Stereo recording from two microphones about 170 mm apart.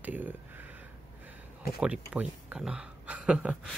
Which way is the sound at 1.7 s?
5° right (ahead or behind).